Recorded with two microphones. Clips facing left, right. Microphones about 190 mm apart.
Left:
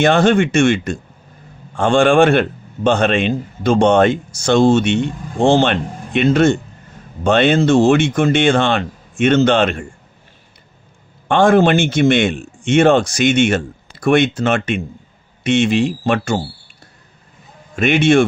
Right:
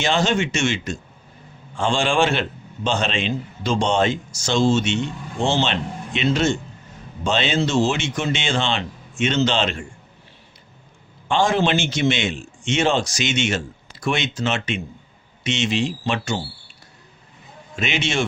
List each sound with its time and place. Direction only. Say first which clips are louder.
0.0 s a man's voice: left 8 dB; 55° left (ahead or behind)
11.3 s a man's voice: left 7 dB; 55° left (ahead or behind)
17.7 s a man's voice: left 11 dB; 55° left (ahead or behind)